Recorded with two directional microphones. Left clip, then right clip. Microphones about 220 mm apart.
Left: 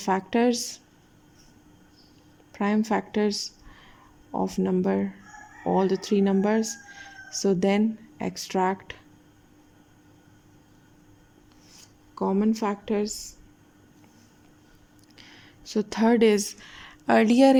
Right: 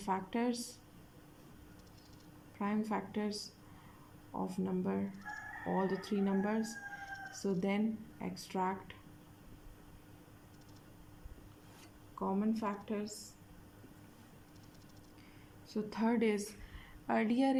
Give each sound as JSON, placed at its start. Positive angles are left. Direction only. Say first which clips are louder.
{"t": 0.0, "sound": "speech", "louder": "left 13 dB", "side_deg": 50}
{"t": 2.6, "sound": "speech", "louder": "left 12 dB", "side_deg": 50}
{"t": 12.2, "sound": "speech", "louder": "left 11 dB", "side_deg": 45}
{"t": 15.2, "sound": "speech", "louder": "left 11 dB", "side_deg": 45}